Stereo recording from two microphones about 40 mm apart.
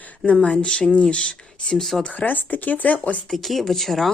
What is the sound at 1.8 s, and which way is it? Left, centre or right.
Speech, centre.